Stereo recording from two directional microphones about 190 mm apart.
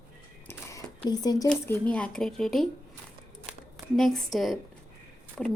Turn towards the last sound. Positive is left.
turn(degrees=5)  # may be behind; listen again after turning